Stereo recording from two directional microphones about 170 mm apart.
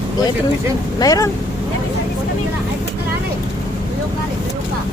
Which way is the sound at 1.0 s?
20° left (ahead or behind).